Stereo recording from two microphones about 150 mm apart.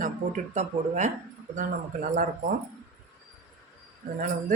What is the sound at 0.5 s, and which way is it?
Speech, 50° right (ahead or behind).